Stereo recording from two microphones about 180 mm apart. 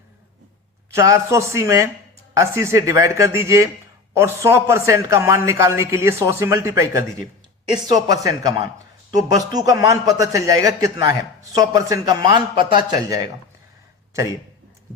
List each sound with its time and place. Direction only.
0.9 s a man's voice: 15° right (ahead or behind)